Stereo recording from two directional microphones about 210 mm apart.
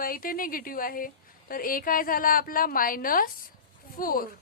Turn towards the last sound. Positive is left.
turn(degrees=40)  # may be behind; listen again after turning